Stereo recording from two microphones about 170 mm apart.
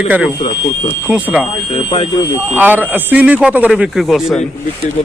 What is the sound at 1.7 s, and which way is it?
Speech, 35° left (ahead or behind).